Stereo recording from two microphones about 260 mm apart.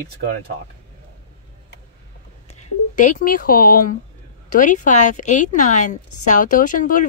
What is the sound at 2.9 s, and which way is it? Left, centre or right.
A woman's voice, left.